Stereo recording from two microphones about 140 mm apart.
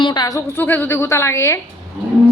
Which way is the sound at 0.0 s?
30° left (ahead or behind).